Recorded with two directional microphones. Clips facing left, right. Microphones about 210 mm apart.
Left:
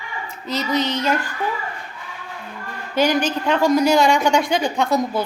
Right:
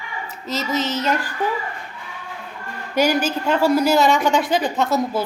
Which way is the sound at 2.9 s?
10° right (ahead or behind).